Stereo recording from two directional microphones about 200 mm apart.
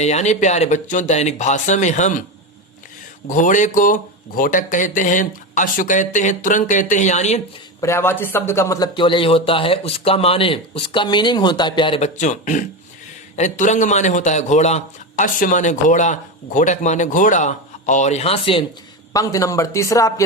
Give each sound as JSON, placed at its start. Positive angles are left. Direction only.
{"t": 0.0, "sound": "a man's voice", "side_deg": 35}
{"t": 3.2, "sound": "a man's voice", "side_deg": 40}
{"t": 7.8, "sound": "a man's voice", "side_deg": 15}
{"t": 19.1, "sound": "a man's voice", "side_deg": 15}